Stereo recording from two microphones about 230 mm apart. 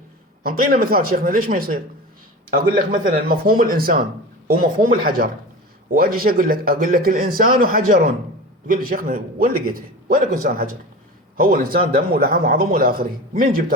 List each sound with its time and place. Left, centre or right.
0.4 s speech: right
5.0 s speech: right